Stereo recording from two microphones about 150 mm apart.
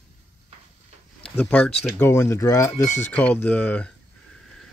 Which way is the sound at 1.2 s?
10° left (ahead or behind).